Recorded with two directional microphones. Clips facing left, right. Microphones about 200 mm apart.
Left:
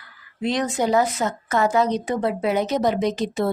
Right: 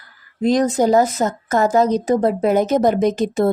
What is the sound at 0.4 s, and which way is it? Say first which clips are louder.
Speech: right 7 dB; 40° right (ahead or behind).